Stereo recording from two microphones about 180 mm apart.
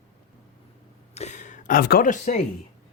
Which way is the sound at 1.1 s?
40° left (ahead or behind).